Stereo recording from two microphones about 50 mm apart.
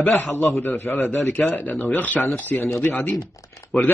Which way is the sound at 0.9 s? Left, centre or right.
Centre.